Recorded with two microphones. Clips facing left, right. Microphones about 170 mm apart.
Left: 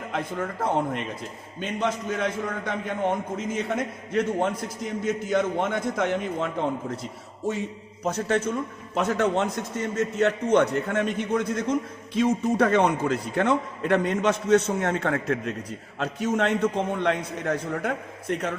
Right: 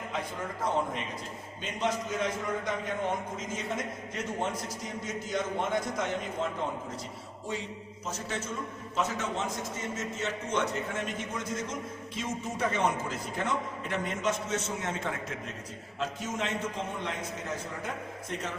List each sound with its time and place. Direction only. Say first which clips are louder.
1.8 s a man's voice: left 3 dB; 60° left (ahead or behind)
8.0 s a man's voice: left 12 dB; 60° left (ahead or behind)